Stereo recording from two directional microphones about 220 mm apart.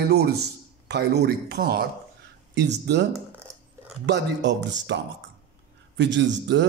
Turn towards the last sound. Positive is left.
turn(degrees=-55)  # may be behind; listen again after turning